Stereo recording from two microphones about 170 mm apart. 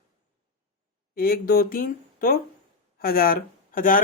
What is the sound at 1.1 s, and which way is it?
Speech, 60° left (ahead or behind).